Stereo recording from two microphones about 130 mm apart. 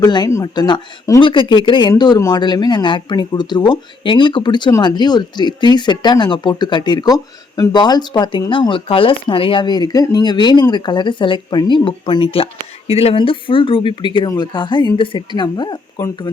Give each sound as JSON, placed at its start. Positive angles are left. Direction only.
{"t": 0.0, "sound": "speech", "side_deg": 30}
{"t": 1.2, "sound": "speech", "side_deg": 40}